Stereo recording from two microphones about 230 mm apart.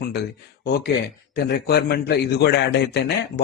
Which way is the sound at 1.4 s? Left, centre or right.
Left.